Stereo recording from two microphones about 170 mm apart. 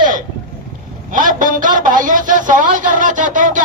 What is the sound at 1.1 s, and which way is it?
A man's voice, 50° right (ahead or behind).